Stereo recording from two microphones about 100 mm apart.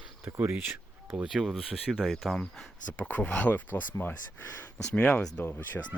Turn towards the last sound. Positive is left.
turn(degrees=15)  # may be behind; listen again after turning